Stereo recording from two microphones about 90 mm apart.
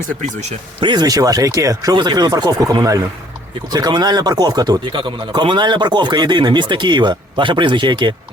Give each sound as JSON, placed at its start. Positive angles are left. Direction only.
{"t": 0.8, "sound": "speech", "side_deg": -60}
{"t": 1.0, "sound": "speech", "side_deg": -45}
{"t": 4.9, "sound": "speech", "side_deg": -65}